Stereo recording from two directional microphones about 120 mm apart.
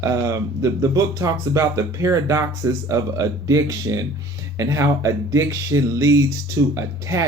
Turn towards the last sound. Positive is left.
turn(degrees=-25)  # may be behind; listen again after turning